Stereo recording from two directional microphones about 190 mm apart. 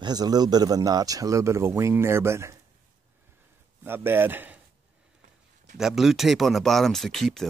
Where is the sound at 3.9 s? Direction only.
10° right (ahead or behind).